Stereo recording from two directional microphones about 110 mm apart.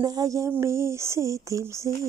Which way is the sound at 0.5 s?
25° right (ahead or behind).